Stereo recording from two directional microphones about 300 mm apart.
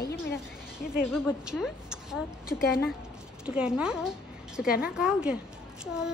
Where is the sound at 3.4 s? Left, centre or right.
Centre.